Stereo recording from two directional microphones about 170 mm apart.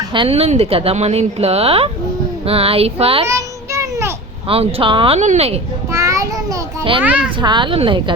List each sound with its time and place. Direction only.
0.1 s speech: 30° right (ahead or behind)
3.2 s child singing: 15° right (ahead or behind)
4.4 s speech: 35° right (ahead or behind)
5.9 s a sound: 20° right (ahead or behind)
7.0 s a child's voice: 10° right (ahead or behind)
7.3 s a woman's voice: 30° right (ahead or behind)